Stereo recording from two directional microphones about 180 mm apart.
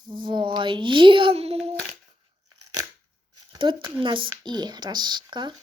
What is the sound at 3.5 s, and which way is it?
Speech, 25° right (ahead or behind).